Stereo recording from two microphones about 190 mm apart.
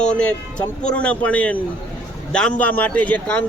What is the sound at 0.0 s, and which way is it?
Speech, 5° left (ahead or behind).